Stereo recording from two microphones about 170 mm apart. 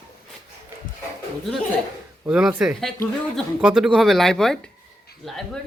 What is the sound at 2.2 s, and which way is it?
Speech, 10° right (ahead or behind).